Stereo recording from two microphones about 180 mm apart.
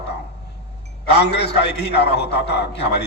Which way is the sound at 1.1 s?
70° left (ahead or behind).